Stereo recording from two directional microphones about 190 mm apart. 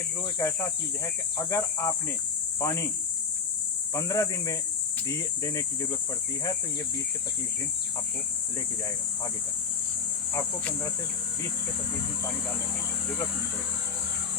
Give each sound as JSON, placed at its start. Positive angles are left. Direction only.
{"t": 0.3, "sound": "speech", "side_deg": 15}
{"t": 3.9, "sound": "speech", "side_deg": 15}
{"t": 10.6, "sound": "speech", "side_deg": 5}